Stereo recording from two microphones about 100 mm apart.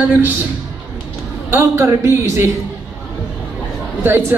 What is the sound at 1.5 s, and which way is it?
Speech, 25° right (ahead or behind).